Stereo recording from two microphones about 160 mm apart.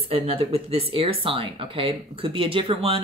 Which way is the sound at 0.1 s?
35° right (ahead or behind).